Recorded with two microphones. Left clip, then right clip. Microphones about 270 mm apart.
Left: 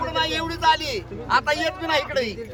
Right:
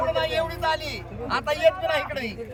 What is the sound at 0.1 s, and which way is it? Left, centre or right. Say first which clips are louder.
A man's voice: even; centre.